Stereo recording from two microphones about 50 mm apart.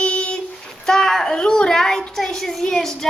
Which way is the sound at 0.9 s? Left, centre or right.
Centre.